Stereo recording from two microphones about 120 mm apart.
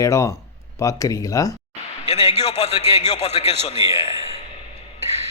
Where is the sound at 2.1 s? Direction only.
60° left (ahead or behind).